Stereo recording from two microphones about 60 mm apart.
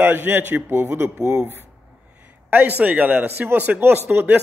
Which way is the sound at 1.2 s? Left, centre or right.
Right.